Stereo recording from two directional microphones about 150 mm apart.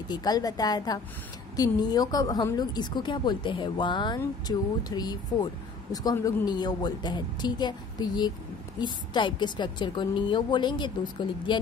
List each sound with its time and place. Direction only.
0.1 s a woman's voice: 25° left (ahead or behind)